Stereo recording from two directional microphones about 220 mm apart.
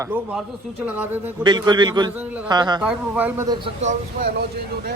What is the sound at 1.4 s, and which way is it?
A man's voice, 20° right (ahead or behind).